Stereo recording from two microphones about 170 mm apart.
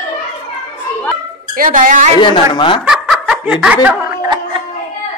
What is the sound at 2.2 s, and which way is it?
Speech, 30° left (ahead or behind).